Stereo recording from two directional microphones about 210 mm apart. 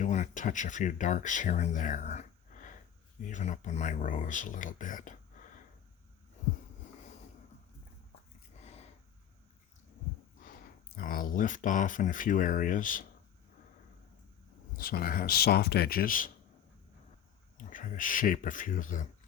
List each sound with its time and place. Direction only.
0.0 s speech: 35° left (ahead or behind)
10.9 s speech: 40° left (ahead or behind)
14.8 s speech: 45° left (ahead or behind)
17.6 s speech: 40° left (ahead or behind)